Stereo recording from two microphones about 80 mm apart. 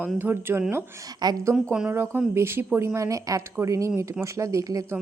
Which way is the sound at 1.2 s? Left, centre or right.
Right.